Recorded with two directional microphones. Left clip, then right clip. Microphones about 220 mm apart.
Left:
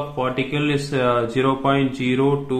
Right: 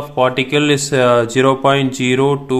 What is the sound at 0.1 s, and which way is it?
Speech, 50° right (ahead or behind).